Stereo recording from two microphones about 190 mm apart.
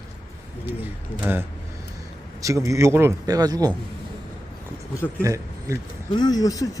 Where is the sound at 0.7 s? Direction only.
10° right (ahead or behind).